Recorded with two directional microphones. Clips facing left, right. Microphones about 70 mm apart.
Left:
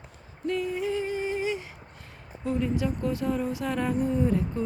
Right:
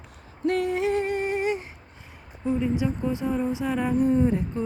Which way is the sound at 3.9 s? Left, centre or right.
Right.